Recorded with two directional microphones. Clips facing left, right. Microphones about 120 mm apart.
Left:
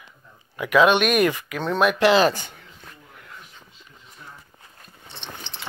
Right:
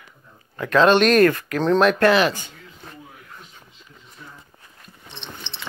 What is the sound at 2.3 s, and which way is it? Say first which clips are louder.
Speech: left 1 dB; 50° left (ahead or behind).